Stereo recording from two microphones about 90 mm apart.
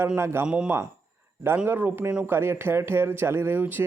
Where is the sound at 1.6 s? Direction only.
20° right (ahead or behind).